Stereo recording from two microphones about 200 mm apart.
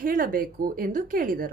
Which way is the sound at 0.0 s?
45° right (ahead or behind).